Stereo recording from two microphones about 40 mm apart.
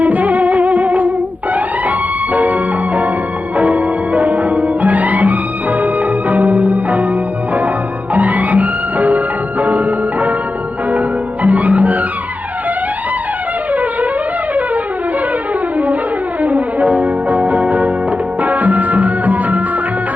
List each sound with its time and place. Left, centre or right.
0.0 s music: right
2.3 s music: right
8.1 s music: right
11.4 s music: right
16.4 s brass instrument: right
18.4 s music: right